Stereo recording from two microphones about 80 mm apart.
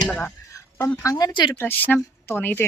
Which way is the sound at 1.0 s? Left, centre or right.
Left.